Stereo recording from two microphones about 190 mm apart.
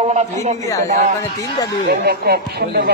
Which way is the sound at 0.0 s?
35° right (ahead or behind).